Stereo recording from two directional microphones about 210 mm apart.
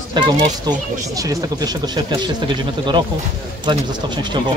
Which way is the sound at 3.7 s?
20° right (ahead or behind).